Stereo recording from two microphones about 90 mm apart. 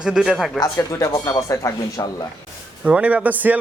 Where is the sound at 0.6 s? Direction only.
40° left (ahead or behind).